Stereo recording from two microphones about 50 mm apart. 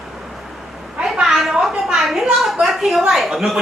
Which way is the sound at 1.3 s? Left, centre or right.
Centre.